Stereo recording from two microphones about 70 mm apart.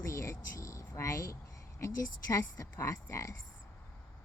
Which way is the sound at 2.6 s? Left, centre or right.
Left.